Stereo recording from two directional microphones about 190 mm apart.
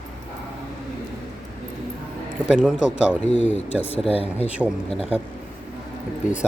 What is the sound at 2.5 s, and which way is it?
Speech, 5° right (ahead or behind).